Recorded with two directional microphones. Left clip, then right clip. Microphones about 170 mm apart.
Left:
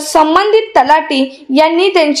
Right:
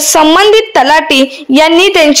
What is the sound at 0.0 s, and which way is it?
A woman's voice, 30° right (ahead or behind).